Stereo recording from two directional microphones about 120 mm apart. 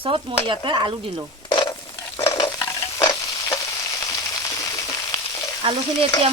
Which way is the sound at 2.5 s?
25° left (ahead or behind).